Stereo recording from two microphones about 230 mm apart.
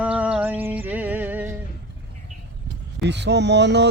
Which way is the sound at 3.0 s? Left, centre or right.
Right.